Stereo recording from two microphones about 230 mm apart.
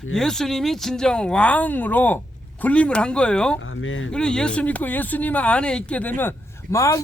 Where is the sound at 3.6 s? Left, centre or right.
Left.